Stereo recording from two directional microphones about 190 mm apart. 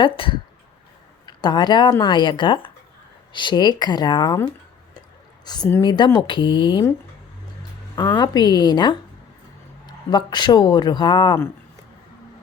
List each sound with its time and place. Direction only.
0.0 s speech: 25° left (ahead or behind)
5.5 s speech: 15° left (ahead or behind)
8.2 s speech: 20° left (ahead or behind)